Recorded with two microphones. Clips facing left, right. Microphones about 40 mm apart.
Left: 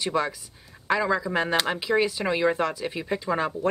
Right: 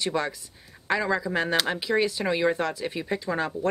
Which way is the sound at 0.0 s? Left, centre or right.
Centre.